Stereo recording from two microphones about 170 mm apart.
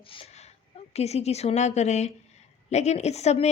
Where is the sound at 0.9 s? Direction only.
40° left (ahead or behind).